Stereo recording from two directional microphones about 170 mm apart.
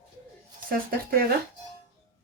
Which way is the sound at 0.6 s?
60° right (ahead or behind).